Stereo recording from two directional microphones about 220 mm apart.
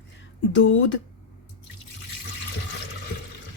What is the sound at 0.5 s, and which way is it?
Speech, 60° left (ahead or behind).